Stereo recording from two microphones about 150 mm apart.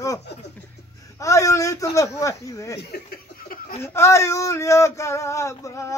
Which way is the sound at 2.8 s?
85° left.